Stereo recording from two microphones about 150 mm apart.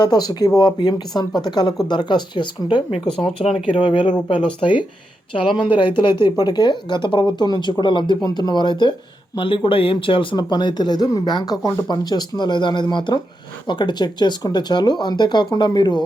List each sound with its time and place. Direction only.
0.0 s speech: 25° left (ahead or behind)